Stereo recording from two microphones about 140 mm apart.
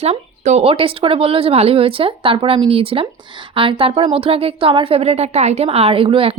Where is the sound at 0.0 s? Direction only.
50° right (ahead or behind).